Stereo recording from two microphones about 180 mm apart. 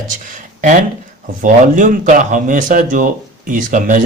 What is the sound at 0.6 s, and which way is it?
Speech, 45° right (ahead or behind).